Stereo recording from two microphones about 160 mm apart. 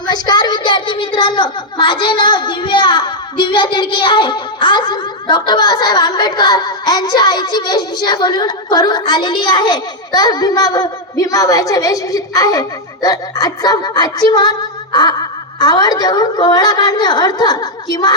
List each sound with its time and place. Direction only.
0.0 s speech: 25° left (ahead or behind)